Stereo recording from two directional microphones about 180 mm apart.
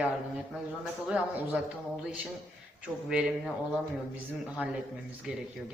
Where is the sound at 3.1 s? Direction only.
5° right (ahead or behind).